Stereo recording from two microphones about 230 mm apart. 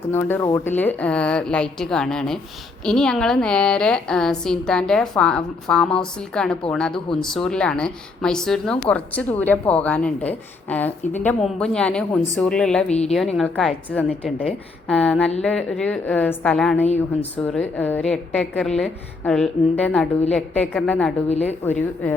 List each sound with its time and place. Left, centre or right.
0.1 s a woman's voice: centre
16.8 s speech: left
17.3 s a woman's voice: centre